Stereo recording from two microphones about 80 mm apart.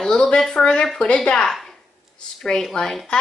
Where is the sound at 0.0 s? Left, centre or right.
Centre.